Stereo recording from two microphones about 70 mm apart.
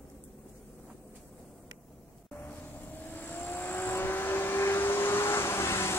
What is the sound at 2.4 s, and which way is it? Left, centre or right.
Vehicle, left.